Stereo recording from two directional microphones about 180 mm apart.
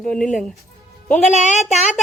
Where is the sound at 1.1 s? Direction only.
40° left (ahead or behind).